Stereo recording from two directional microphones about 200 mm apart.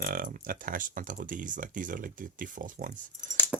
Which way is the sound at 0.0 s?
45° right (ahead or behind).